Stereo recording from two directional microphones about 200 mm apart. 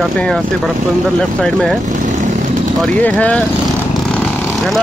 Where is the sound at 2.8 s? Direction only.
5° left (ahead or behind).